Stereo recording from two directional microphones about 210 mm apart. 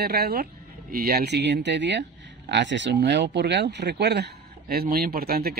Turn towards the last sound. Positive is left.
turn(degrees=-45)  # may be behind; listen again after turning